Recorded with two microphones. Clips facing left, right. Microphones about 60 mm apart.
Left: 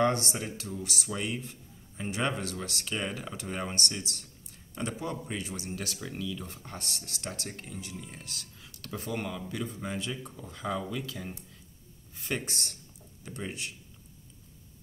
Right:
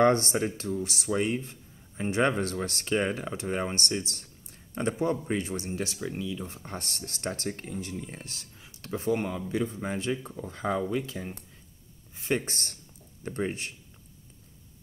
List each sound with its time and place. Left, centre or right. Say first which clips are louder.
0.0 s speech: right 5 dB; right
5.9 s speech: right 3 dB; centre; by 13.7 s right